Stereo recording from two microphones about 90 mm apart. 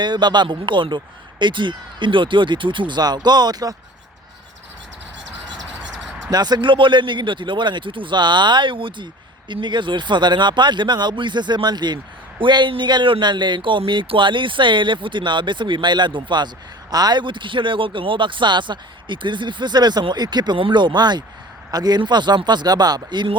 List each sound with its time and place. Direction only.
0.0 s speech: 55° right (ahead or behind)
6.3 s speech: 50° right (ahead or behind)
20.6 s speech: 65° right (ahead or behind)